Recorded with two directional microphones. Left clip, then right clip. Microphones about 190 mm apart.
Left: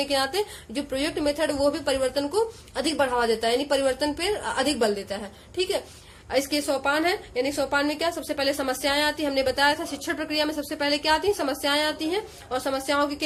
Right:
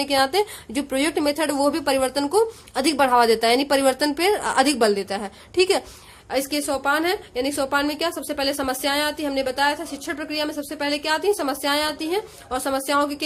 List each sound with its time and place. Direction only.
0.0 s a woman's voice: 30° right (ahead or behind)
6.3 s a woman's voice: 20° right (ahead or behind)